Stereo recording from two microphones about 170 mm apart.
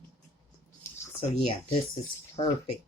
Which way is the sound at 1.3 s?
35° left (ahead or behind).